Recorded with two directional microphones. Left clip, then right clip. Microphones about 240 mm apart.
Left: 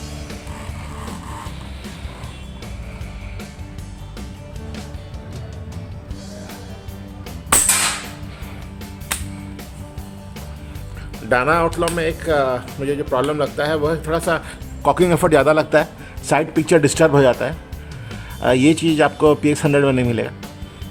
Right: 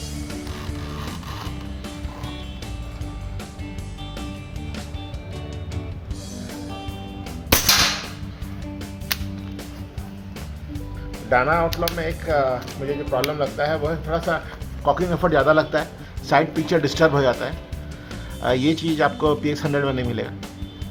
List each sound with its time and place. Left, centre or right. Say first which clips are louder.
11.3 s speech: left 2 dB; left